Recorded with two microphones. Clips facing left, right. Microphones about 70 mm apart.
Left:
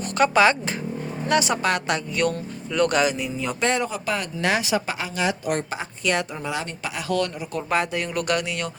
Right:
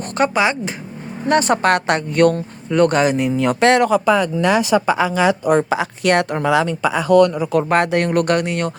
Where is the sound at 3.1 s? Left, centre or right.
Right.